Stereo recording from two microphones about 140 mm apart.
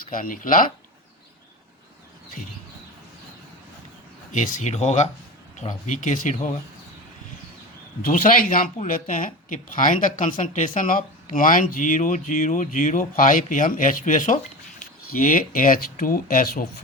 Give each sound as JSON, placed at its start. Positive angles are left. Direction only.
{"t": 0.1, "sound": "speech", "side_deg": 75}
{"t": 4.3, "sound": "speech", "side_deg": 65}
{"t": 8.0, "sound": "speech", "side_deg": 75}